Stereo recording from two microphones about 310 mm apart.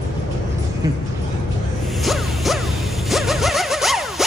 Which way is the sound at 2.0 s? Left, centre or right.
Centre.